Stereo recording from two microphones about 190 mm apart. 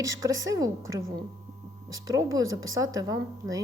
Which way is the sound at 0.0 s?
15° right (ahead or behind).